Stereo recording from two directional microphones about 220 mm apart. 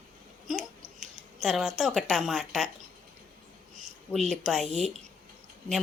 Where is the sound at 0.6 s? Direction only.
35° right (ahead or behind).